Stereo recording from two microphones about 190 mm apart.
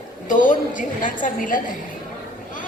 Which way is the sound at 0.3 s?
45° left (ahead or behind).